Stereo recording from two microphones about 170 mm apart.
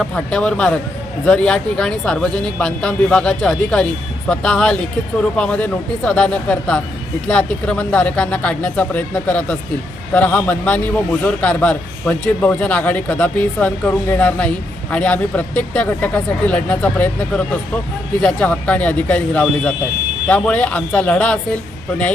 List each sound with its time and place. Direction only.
0.0 s a man's voice: 5° left (ahead or behind)